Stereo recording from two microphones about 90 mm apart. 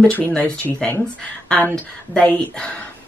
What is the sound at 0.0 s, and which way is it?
Speech, 15° left (ahead or behind).